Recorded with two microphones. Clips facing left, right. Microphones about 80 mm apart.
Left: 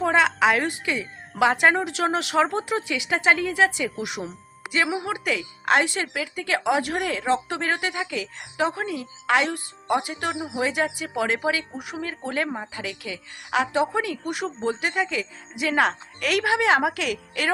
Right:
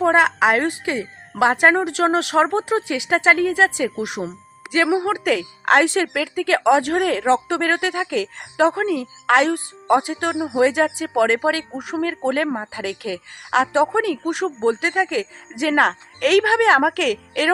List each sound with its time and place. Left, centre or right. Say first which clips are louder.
0.0 s speech: right 4 dB; right
6.6 s speech: right 7 dB; right
9.8 s speech: right 7 dB; right
10.1 s speech: right 5 dB; right
11.0 s speech: right 7 dB; right
11.8 s speech: right 8 dB; right
12.0 s speech: right 7 dB; right
13.7 s speech: right 6 dB; right